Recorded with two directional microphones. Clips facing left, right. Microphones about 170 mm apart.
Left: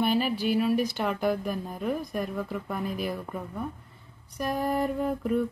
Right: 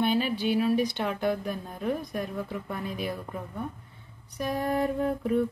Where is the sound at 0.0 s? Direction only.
5° left (ahead or behind).